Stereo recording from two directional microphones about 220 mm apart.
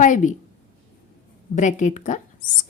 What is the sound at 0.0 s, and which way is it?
Speech, 35° left (ahead or behind).